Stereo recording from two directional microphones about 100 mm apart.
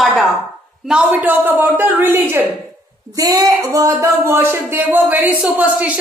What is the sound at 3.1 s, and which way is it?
Speech, 40° right (ahead or behind).